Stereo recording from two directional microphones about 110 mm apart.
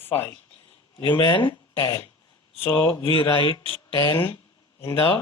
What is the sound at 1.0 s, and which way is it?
Speech, 50° left (ahead or behind).